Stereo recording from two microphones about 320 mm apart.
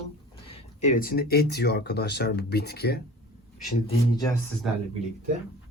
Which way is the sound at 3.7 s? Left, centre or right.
Centre.